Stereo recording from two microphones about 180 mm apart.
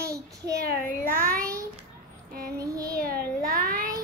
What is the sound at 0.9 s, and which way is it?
Speech, 50° right (ahead or behind).